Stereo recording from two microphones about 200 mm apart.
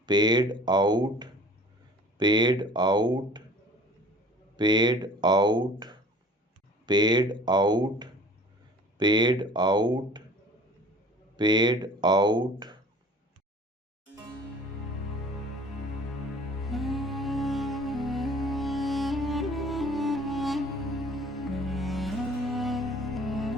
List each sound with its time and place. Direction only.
0.0 s speech: 20° right (ahead or behind)
4.5 s speech: 20° right (ahead or behind)
11.3 s speech: 20° right (ahead or behind)
16.6 s music: centre (ahead or behind)